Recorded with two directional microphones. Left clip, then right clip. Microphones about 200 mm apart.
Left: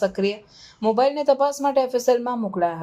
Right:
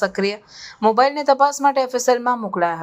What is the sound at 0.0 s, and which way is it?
Speech, 5° right (ahead or behind).